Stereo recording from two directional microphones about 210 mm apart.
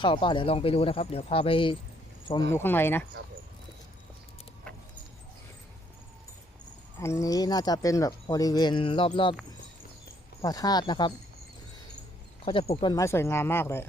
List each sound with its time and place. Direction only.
0.0 s speech: 25° left (ahead or behind)
2.5 s speech: 10° left (ahead or behind)
7.0 s speech: 15° left (ahead or behind)
10.4 s speech: 15° left (ahead or behind)
12.5 s speech: 25° left (ahead or behind); by 13.8 s 10° left (ahead or behind)